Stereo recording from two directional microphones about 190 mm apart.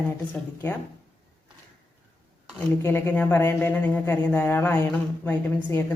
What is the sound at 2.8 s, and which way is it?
Speech, 10° left (ahead or behind).